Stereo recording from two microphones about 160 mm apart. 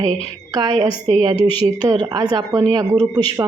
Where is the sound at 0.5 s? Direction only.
30° right (ahead or behind).